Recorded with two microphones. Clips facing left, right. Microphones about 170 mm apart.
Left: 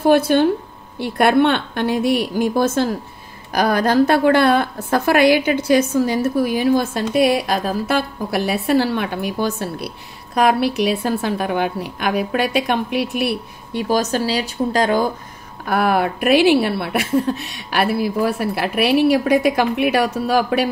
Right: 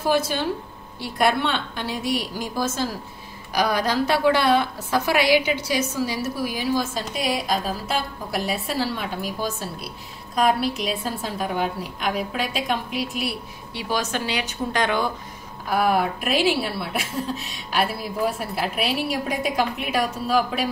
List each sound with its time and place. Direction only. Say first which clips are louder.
0.0 s a woman's voice: left 9 dB; 60° left (ahead or behind)
13.8 s speech: left 7 dB; 40° left (ahead or behind)
15.7 s a woman's voice: left 3 dB; 65° left (ahead or behind)